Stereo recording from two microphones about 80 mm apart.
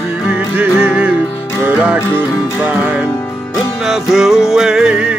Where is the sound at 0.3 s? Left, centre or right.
Centre.